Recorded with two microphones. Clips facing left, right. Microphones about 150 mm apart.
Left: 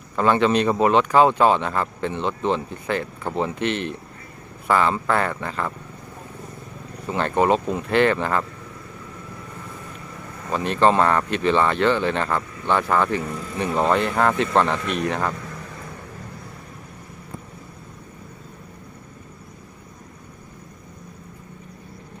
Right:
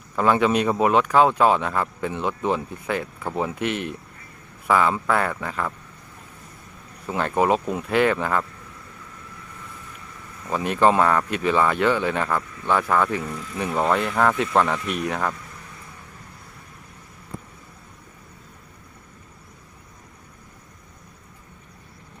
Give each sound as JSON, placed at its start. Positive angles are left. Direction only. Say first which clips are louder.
{"t": 0.2, "sound": "speech", "louder": "left 1 dB", "side_deg": -5}
{"t": 7.1, "sound": "speech", "louder": "left 1 dB", "side_deg": -5}
{"t": 10.5, "sound": "speech", "louder": "left 1 dB", "side_deg": -10}
{"t": 15.4, "sound": "vehicle", "louder": "left 7 dB", "side_deg": 60}